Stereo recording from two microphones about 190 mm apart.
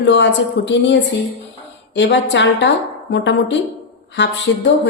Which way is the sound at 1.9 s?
70° left (ahead or behind).